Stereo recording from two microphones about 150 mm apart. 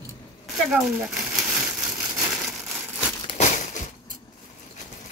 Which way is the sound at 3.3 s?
55° left (ahead or behind).